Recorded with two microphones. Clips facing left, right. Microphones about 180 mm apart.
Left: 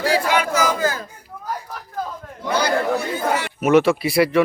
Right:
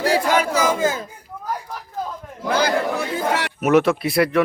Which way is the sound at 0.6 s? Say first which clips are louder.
Right 1 dB; 25° right (ahead or behind).